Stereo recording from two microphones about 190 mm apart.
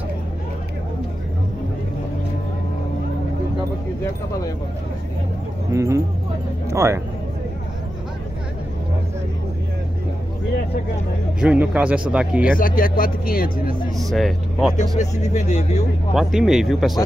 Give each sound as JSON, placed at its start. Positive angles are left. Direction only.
{"t": 5.7, "sound": "speech", "side_deg": -15}
{"t": 11.4, "sound": "speech", "side_deg": -5}
{"t": 12.4, "sound": "speech", "side_deg": 45}
{"t": 14.1, "sound": "speech", "side_deg": 0}
{"t": 14.8, "sound": "speech", "side_deg": 40}
{"t": 16.2, "sound": "speech", "side_deg": 0}